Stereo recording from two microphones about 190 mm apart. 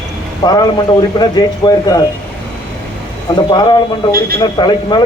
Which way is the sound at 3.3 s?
25° left (ahead or behind).